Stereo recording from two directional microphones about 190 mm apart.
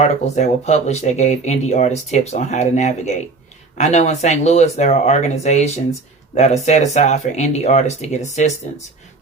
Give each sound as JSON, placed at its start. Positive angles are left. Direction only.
{"t": 0.0, "sound": "speech", "side_deg": 40}